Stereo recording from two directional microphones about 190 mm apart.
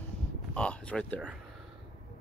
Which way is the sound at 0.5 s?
5° left (ahead or behind).